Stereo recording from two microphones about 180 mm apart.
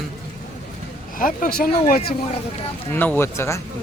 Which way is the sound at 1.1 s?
50° left (ahead or behind).